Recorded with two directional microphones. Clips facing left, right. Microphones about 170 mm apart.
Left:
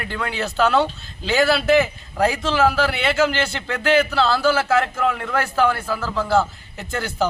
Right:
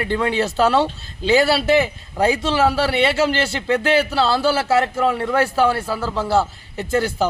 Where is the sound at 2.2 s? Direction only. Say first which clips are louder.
Right 1 dB; 30° right (ahead or behind).